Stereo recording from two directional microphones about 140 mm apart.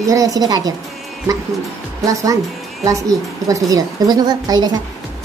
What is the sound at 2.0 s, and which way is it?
Speech, 25° right (ahead or behind).